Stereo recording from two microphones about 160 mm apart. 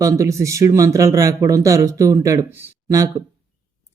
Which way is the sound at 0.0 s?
20° right (ahead or behind).